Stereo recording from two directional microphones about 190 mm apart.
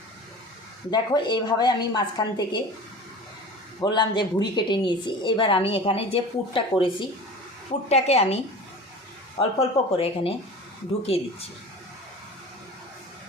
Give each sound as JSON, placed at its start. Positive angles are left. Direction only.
{"t": 0.9, "sound": "a woman's voice", "side_deg": 20}
{"t": 3.8, "sound": "a woman's voice", "side_deg": 20}
{"t": 7.9, "sound": "a woman's voice", "side_deg": 35}
{"t": 9.4, "sound": "a woman's voice", "side_deg": 30}